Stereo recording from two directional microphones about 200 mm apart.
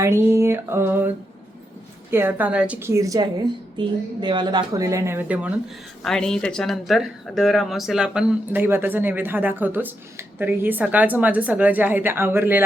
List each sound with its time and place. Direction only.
0.0 s speech: 15° right (ahead or behind)